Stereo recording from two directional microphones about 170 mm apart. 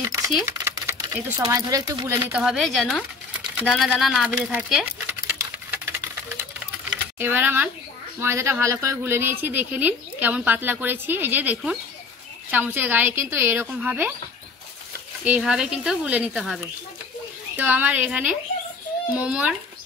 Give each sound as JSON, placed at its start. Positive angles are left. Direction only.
{"t": 0.5, "sound": "speech", "side_deg": -15}
{"t": 2.3, "sound": "speech", "side_deg": 0}
{"t": 4.5, "sound": "a sound", "side_deg": -5}
{"t": 7.2, "sound": "a woman's voice", "side_deg": -10}
{"t": 15.2, "sound": "a woman's voice", "side_deg": -5}